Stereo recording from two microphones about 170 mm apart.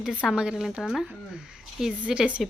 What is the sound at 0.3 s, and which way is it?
Speech, 5° right (ahead or behind).